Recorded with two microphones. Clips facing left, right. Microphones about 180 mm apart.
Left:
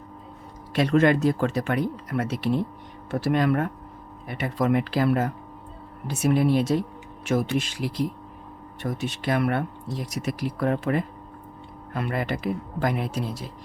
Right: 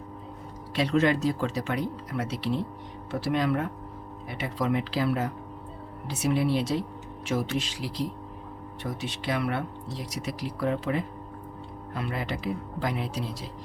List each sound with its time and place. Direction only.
0.7 s speech: 50° left (ahead or behind)